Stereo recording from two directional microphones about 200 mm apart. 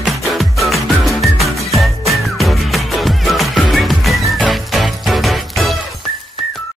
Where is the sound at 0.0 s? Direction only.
Centre (ahead or behind).